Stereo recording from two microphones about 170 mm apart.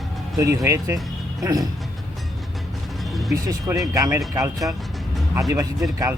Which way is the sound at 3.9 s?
20° right (ahead or behind).